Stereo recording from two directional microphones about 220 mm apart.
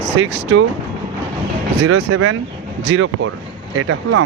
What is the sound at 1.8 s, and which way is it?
Speech, 55° right (ahead or behind).